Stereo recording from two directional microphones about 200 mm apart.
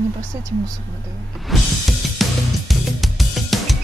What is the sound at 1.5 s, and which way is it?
Music, centre (ahead or behind).